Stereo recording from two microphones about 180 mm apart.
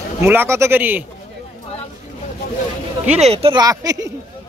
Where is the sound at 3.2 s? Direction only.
35° right (ahead or behind).